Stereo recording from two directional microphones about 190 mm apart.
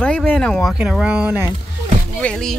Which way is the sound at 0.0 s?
5° left (ahead or behind).